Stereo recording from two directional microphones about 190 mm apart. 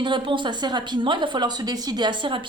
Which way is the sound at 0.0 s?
25° right (ahead or behind).